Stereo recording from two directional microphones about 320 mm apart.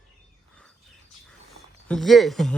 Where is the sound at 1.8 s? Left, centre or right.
Centre.